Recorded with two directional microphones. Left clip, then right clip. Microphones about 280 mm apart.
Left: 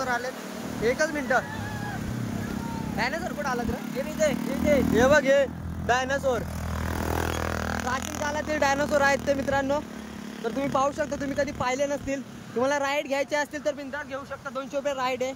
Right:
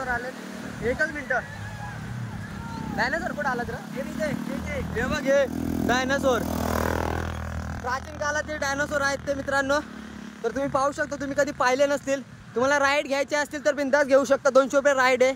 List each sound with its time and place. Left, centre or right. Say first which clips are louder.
0.9 s speech: even; centre
3.0 s speech: right 3 dB; centre
4.9 s speech: left 6 dB; centre
5.3 s speech: even; centre
7.9 s speech: right 6 dB; centre
13.9 s speech: right 15 dB; centre